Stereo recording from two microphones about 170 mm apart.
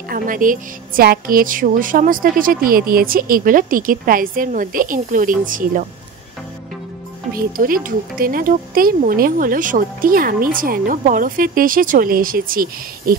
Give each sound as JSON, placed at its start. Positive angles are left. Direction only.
{"t": 0.1, "sound": "speech", "side_deg": -50}
{"t": 7.3, "sound": "speech", "side_deg": -55}